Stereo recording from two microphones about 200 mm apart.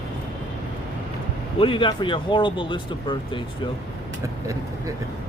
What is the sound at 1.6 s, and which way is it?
Speech, 25° left (ahead or behind).